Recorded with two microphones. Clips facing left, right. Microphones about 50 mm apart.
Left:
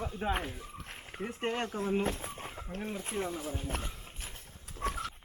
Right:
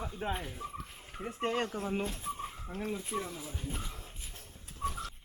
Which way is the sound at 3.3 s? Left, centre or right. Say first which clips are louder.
Left 6 dB; left.